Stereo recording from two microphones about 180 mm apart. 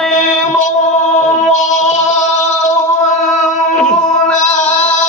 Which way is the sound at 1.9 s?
40° left (ahead or behind).